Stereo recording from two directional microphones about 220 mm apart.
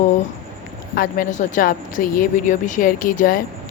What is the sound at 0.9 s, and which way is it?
Speech, 35° left (ahead or behind).